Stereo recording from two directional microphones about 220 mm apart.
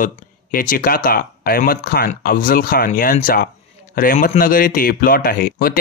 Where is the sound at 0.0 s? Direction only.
40° left (ahead or behind).